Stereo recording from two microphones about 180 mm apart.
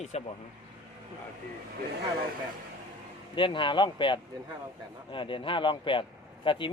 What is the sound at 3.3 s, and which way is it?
A man's voice, 25° left (ahead or behind).